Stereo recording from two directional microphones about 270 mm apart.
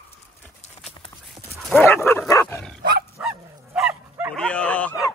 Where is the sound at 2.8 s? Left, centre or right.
Right.